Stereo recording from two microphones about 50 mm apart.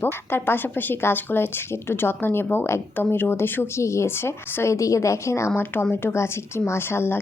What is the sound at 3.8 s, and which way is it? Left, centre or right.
A woman's voice, left.